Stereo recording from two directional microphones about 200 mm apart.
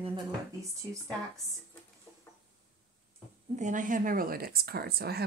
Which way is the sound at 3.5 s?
40° right (ahead or behind).